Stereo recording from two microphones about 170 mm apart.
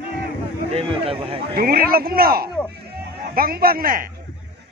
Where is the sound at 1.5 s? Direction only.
60° right (ahead or behind).